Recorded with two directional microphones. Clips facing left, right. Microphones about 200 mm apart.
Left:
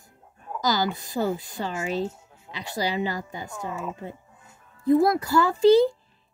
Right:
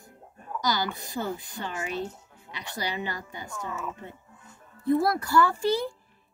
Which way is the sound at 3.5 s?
25° left (ahead or behind).